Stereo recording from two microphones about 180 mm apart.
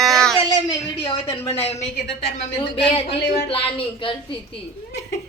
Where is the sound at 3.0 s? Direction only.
30° left (ahead or behind).